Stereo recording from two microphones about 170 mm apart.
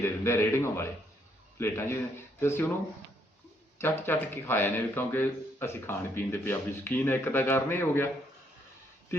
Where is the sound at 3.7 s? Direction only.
15° left (ahead or behind).